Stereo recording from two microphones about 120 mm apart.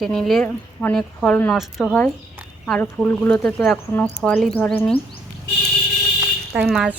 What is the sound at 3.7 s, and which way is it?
Speech, 15° left (ahead or behind).